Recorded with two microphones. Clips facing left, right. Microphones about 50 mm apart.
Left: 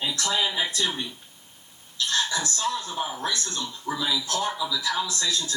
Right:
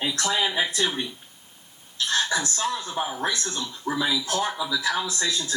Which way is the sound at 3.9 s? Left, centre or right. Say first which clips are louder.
Right 4 dB; right.